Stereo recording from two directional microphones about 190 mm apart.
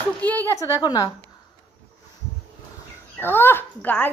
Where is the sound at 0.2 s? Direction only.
10° left (ahead or behind).